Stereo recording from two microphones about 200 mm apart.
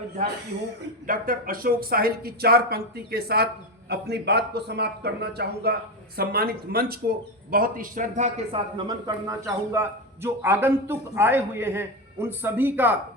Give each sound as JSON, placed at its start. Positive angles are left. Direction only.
{"t": 1.0, "sound": "a man's voice", "side_deg": -45}
{"t": 8.7, "sound": "a man's voice", "side_deg": -20}